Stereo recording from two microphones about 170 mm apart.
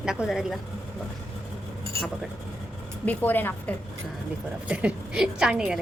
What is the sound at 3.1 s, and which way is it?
Speech, 10° left (ahead or behind).